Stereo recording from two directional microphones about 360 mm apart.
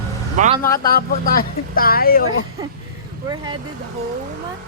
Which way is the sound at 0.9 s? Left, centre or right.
Left.